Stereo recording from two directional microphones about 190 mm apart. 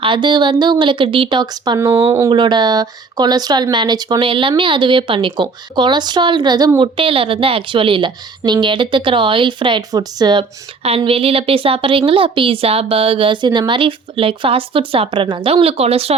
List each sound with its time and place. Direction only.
0.0 s a woman's voice: 25° right (ahead or behind)